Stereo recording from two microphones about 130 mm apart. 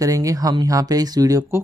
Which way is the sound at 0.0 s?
25° right (ahead or behind).